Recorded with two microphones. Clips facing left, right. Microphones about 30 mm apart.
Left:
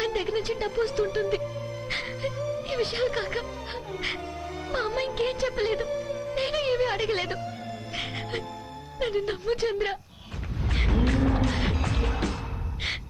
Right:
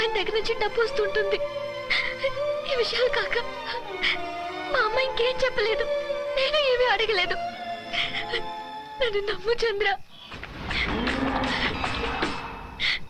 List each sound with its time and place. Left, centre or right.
0.0 s speech: right
10.7 s cattle: right